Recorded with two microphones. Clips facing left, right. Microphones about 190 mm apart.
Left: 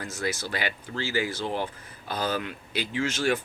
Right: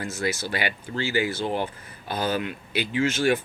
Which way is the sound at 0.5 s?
65° right (ahead or behind).